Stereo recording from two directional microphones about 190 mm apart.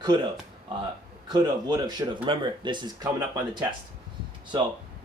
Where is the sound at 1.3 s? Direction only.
20° right (ahead or behind).